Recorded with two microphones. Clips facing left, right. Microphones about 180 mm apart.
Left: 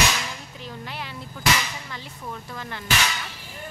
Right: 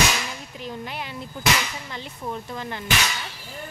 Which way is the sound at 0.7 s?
15° right (ahead or behind).